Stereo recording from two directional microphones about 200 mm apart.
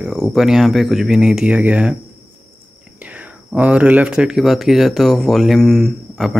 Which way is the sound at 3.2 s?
5° right (ahead or behind).